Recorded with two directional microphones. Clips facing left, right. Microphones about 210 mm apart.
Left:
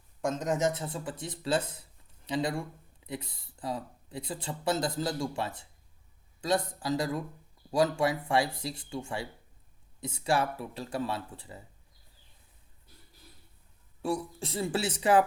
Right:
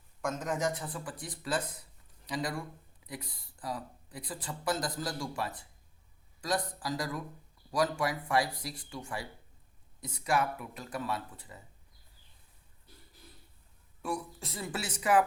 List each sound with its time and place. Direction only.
0.2 s speech: 25° left (ahead or behind)
14.0 s speech: 30° left (ahead or behind)